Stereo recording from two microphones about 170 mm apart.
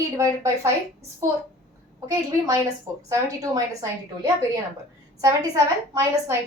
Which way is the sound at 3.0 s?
20° right (ahead or behind).